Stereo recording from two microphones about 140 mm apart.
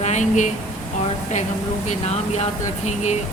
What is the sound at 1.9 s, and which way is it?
Speech, 50° left (ahead or behind).